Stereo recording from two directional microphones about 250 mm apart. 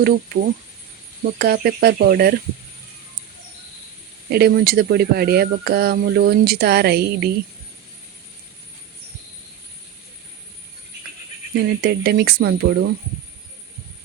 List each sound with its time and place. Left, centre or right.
1.2 s speech: right
4.3 s speech: right
11.5 s speech: right